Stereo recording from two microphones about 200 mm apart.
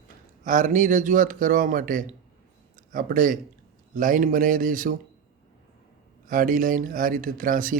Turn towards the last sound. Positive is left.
turn(degrees=-45)  # may be behind; listen again after turning